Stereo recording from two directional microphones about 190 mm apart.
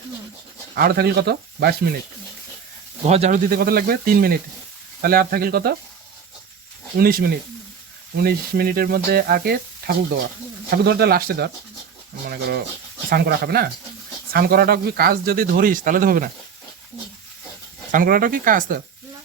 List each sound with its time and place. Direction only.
0.8 s speech: 55° right (ahead or behind)
3.0 s speech: 35° right (ahead or behind)
3.5 s speech: 50° right (ahead or behind)
7.0 s speech: 50° right (ahead or behind)
13.1 s speech: 55° right (ahead or behind)
17.9 s speech: 45° right (ahead or behind)